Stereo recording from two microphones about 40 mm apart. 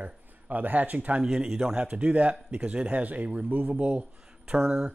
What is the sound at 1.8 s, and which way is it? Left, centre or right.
Speech, right.